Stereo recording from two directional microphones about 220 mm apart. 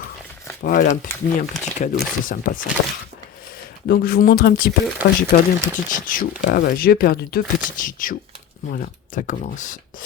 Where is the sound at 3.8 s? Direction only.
45° left (ahead or behind).